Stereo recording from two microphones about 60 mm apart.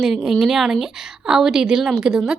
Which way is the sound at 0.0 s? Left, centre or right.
Centre.